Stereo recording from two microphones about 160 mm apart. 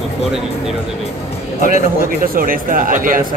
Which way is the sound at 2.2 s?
60° right (ahead or behind).